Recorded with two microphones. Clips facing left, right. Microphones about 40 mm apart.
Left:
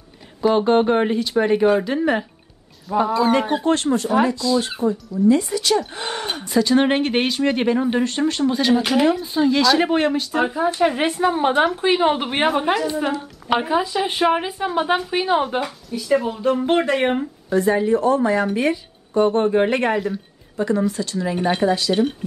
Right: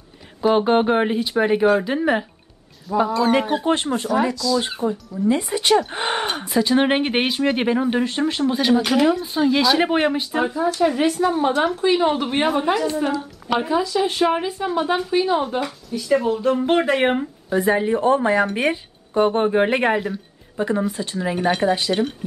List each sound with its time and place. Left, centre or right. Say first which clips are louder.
0.4 s speech: left 1 dB; centre
3.6 s speech: left 2 dB; centre
4.4 s speech: left 1 dB; left
4.8 s speech: left 2 dB; centre
5.3 s speech: left 2 dB; centre
5.9 s gasp: right 4 dB; right
6.2 s speech: left 1 dB; centre
8.7 s speech: even; centre
10.4 s a woman's voice: left 1 dB; left
13.5 s a woman's voice: left 1 dB; left
15.6 s speech: even; centre
17.6 s speech: even; right
18.4 s speech: even; centre
21.4 s speech: even; centre